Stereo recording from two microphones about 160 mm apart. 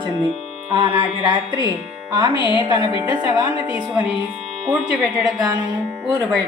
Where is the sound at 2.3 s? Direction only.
30° left (ahead or behind).